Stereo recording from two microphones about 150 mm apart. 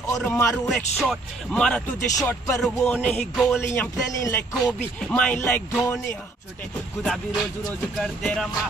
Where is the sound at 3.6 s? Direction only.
20° left (ahead or behind).